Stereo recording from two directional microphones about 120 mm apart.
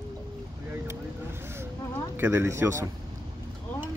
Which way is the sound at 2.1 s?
20° right (ahead or behind).